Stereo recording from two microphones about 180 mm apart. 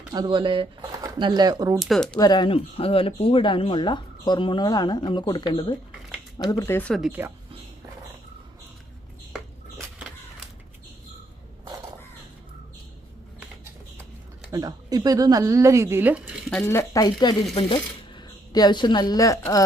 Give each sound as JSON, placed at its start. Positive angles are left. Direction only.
{"t": 0.1, "sound": "speech", "side_deg": -25}
{"t": 1.8, "sound": "speech", "side_deg": 0}
{"t": 2.1, "sound": "speech", "side_deg": 20}
{"t": 7.1, "sound": "speech", "side_deg": -10}
{"t": 14.5, "sound": "speech", "side_deg": -20}
{"t": 16.6, "sound": "a woman's voice", "side_deg": 15}